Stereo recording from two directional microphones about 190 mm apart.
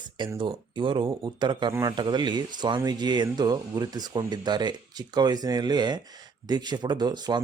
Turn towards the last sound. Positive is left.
turn(degrees=-20)  # may be behind; listen again after turning